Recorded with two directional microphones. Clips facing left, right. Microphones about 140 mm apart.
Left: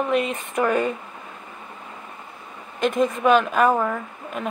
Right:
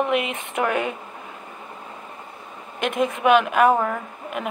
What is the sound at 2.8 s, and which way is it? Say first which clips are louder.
Speech: left 2 dB; 10° right (ahead or behind).